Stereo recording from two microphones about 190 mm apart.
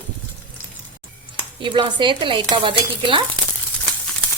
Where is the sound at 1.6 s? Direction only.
25° right (ahead or behind).